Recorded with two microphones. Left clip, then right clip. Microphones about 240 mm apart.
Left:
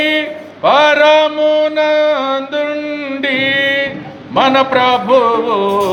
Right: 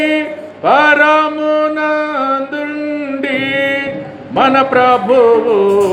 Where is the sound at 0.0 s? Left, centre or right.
Centre.